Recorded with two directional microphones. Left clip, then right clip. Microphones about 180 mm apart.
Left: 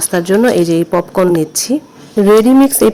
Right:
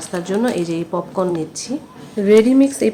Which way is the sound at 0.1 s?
45° left (ahead or behind).